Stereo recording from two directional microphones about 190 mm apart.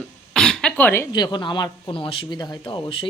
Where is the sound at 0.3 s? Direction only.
5° left (ahead or behind).